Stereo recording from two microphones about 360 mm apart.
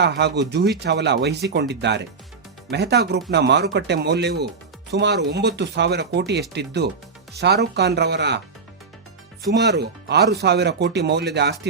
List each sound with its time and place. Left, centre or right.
0.0 s speech: right
9.5 s speech: right